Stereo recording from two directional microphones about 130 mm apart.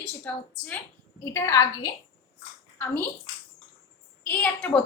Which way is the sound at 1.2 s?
20° left (ahead or behind).